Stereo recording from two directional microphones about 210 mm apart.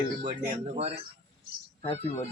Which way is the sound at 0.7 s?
30° right (ahead or behind).